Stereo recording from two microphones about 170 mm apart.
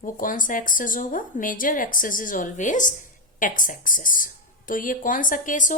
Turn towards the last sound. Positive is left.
turn(degrees=50)  # may be behind; listen again after turning